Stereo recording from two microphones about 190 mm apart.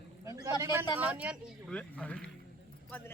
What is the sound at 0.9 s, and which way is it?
Speech, 10° right (ahead or behind).